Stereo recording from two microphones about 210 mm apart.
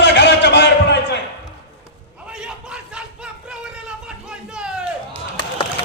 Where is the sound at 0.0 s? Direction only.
55° left (ahead or behind).